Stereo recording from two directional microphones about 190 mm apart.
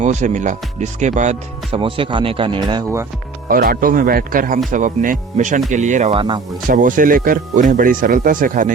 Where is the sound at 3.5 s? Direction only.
50° right (ahead or behind); by 6.4 s 25° right (ahead or behind).